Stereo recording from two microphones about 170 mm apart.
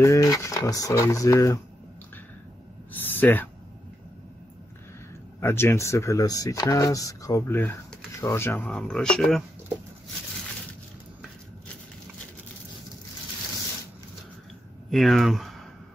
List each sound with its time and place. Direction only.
0.0 s speech: 20° left (ahead or behind)
2.9 s a sound: 10° left (ahead or behind)
5.4 s speech: 15° left (ahead or behind)
14.9 s speech: centre (ahead or behind)